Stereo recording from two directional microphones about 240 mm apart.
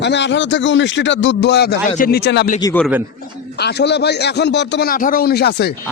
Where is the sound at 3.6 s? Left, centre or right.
Left.